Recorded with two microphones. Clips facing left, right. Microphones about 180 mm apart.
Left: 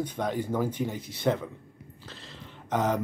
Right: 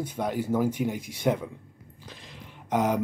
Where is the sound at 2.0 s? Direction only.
15° right (ahead or behind).